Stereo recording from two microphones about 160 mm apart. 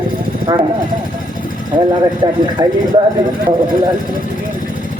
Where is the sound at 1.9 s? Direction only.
25° right (ahead or behind).